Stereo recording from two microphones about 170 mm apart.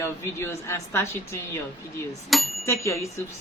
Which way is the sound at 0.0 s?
15° left (ahead or behind).